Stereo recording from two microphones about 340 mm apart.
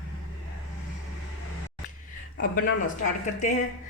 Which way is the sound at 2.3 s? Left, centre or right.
Left.